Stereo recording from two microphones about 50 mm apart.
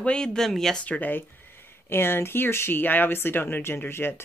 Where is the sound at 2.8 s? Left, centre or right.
Left.